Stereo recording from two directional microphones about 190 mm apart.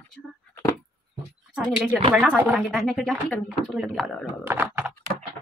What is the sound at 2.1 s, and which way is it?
Speech, 5° right (ahead or behind).